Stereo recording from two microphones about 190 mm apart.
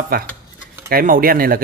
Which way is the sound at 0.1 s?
50° right (ahead or behind).